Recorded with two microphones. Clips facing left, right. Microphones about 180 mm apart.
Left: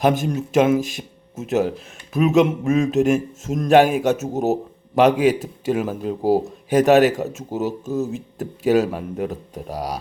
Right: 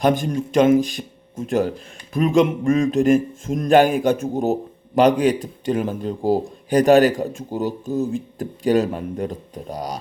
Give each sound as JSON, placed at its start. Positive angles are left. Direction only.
{"t": 0.0, "sound": "speech", "side_deg": 5}